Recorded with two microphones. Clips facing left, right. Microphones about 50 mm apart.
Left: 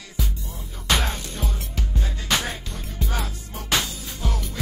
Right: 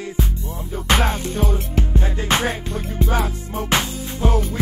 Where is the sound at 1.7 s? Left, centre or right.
Right.